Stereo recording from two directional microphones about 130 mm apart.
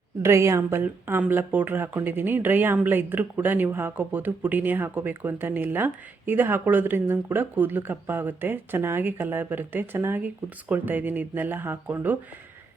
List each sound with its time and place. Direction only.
0.2 s a woman's voice: 20° right (ahead or behind)